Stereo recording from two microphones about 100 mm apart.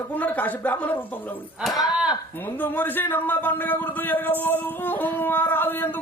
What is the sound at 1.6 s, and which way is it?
Speech, centre (ahead or behind).